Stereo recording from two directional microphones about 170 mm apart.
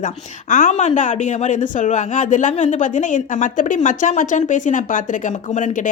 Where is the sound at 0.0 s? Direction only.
45° left (ahead or behind).